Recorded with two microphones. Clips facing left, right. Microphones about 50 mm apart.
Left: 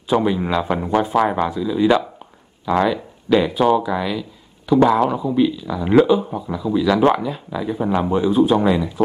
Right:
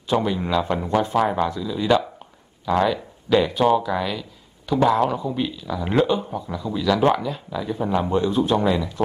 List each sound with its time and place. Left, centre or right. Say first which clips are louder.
0.1 s speech: left 3 dB; centre